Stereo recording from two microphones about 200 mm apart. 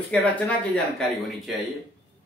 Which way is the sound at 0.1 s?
5° left (ahead or behind).